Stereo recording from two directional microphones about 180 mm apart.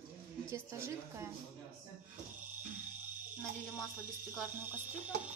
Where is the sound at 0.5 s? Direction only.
15° right (ahead or behind).